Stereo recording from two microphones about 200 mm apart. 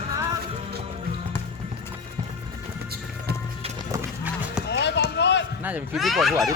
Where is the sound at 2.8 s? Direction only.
50° right (ahead or behind).